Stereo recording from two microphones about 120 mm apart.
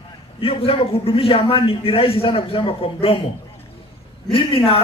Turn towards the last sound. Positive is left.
turn(degrees=50)  # may be behind; listen again after turning